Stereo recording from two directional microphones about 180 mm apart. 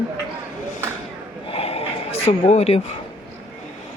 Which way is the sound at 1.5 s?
35° left (ahead or behind).